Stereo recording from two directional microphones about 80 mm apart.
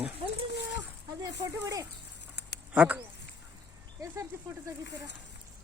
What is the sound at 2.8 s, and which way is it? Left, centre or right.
Speech, centre.